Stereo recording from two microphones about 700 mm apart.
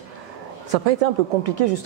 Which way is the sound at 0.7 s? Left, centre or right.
Right.